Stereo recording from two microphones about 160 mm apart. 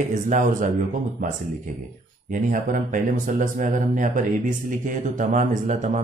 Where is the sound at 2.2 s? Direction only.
55° right (ahead or behind).